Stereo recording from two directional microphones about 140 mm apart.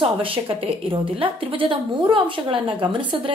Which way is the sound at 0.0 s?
40° right (ahead or behind).